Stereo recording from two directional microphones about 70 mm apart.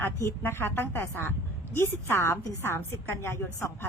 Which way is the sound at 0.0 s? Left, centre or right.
Left.